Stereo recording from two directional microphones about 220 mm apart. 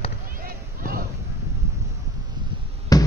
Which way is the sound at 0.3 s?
40° right (ahead or behind).